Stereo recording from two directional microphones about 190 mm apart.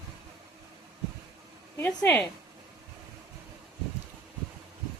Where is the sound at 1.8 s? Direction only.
10° left (ahead or behind).